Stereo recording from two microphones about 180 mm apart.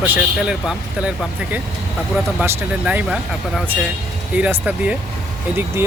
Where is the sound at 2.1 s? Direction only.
5° right (ahead or behind).